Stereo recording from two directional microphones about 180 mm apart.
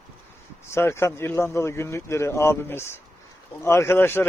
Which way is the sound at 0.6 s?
15° left (ahead or behind).